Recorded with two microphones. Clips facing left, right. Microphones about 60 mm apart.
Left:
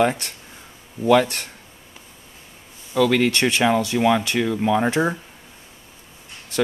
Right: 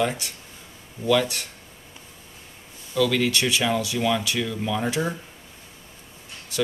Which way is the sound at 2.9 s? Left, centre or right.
Left.